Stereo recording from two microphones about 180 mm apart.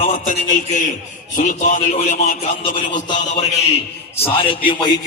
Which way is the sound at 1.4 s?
45° left (ahead or behind).